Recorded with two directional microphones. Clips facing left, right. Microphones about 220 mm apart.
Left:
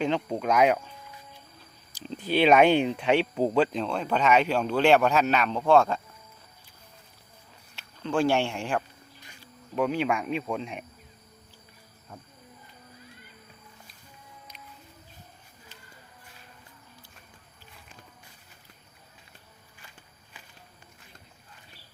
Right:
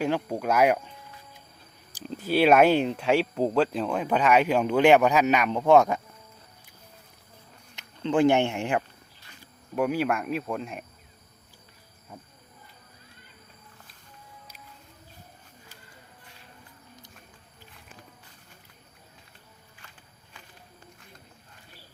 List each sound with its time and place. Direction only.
0.0 s speech: 10° right (ahead or behind)
2.0 s speech: 5° right (ahead or behind)
7.8 s speech: 20° right (ahead or behind)
9.4 s speech: 10° right (ahead or behind)
12.1 s speech: 5° right (ahead or behind)